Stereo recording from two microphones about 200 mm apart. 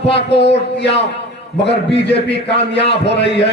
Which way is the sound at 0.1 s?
60° left (ahead or behind).